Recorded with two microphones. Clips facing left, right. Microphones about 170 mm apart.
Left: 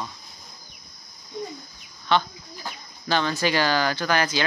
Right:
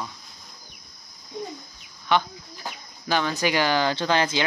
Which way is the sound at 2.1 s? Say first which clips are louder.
Even; 15° right (ahead or behind).